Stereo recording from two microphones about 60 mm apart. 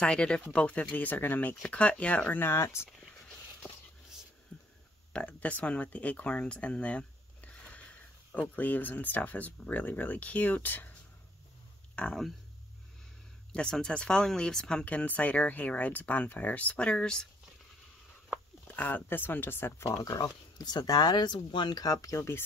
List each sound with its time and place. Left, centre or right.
0.0 s speech: centre
2.4 s speech: left
4.5 s a sound: left
5.1 s speech: left
11.9 s a sound: centre
13.5 s speech: centre
18.7 s speech: left
19.8 s speech: left